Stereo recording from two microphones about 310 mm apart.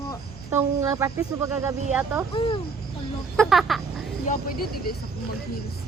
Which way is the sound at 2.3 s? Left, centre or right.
Centre.